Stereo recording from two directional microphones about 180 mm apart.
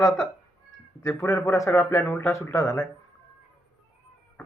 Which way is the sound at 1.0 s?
15° left (ahead or behind).